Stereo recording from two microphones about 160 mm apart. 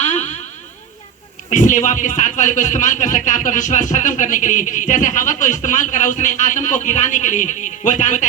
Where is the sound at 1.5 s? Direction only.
50° left (ahead or behind).